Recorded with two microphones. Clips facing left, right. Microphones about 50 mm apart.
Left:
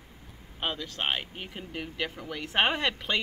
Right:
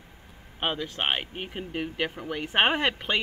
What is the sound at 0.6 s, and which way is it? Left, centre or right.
Speech, right.